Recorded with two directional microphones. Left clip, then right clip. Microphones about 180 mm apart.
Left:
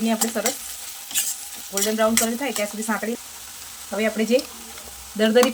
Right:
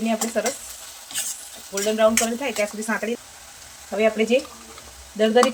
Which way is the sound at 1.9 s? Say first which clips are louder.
Right 3 dB; 10° left (ahead or behind).